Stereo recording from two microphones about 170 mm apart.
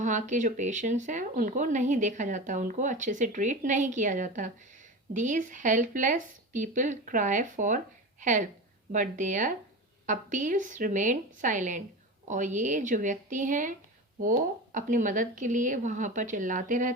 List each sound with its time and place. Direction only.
0.0 s speech: 45° right (ahead or behind)